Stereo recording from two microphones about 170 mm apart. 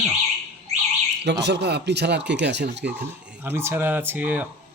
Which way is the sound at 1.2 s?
85° right.